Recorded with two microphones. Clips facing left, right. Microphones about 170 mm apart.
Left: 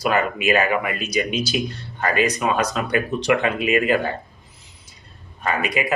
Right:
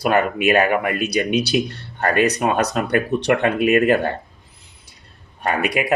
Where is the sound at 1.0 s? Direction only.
65° right (ahead or behind).